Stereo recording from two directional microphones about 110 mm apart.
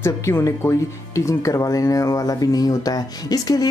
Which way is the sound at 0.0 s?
25° left (ahead or behind).